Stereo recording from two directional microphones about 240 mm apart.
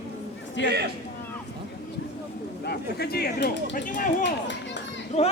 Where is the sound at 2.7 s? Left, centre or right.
Left.